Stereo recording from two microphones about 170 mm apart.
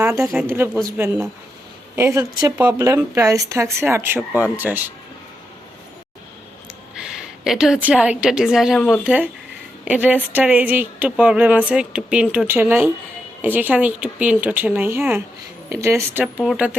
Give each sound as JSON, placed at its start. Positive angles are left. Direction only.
{"t": 0.0, "sound": "speech", "side_deg": -15}
{"t": 6.9, "sound": "a sound", "side_deg": 0}
{"t": 8.2, "sound": "a woman's voice", "side_deg": -5}
{"t": 16.2, "sound": "a woman's voice", "side_deg": 0}